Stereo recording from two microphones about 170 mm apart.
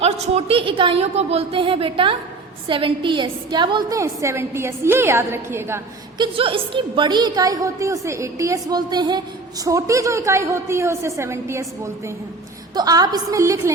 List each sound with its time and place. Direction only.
0.0 s a woman's voice: 35° right (ahead or behind); by 5.8 s 15° right (ahead or behind)
6.1 s a woman's voice: 30° right (ahead or behind)